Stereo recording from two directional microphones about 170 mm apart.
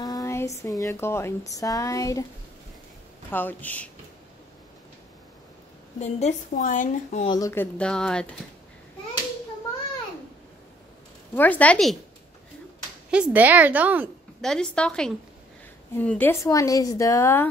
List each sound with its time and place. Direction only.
0.0 s a sound: 20° left (ahead or behind)
0.6 s speech: 20° left (ahead or behind)
3.3 s speech: 10° left (ahead or behind)
5.9 s a woman's voice: 40° left (ahead or behind)
7.2 s speech: 20° left (ahead or behind)
7.7 s a woman's voice: 5° left (ahead or behind)
11.3 s speech: 10° left (ahead or behind)
13.1 s a woman's voice: 10° right (ahead or behind)
14.4 s a woman's voice: 5° left (ahead or behind)